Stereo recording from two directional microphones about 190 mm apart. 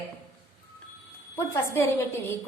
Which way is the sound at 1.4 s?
15° left (ahead or behind).